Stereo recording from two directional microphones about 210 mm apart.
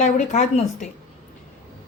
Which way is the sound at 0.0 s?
35° left (ahead or behind).